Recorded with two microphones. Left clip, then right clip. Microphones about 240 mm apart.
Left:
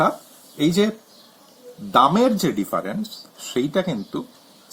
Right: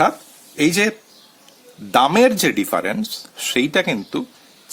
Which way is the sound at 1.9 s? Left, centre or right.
Right.